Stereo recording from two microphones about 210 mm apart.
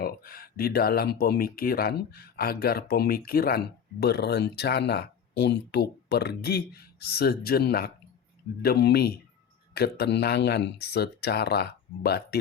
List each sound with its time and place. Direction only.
0.0 s speech: 45° left (ahead or behind)